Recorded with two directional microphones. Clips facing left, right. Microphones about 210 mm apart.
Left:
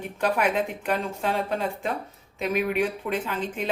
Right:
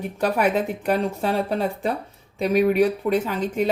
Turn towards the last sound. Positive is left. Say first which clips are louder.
# right 6 dB
turn(degrees=-40)  # may be behind; listen again after turning